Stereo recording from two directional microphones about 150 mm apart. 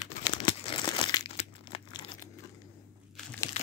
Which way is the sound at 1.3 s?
45° left (ahead or behind).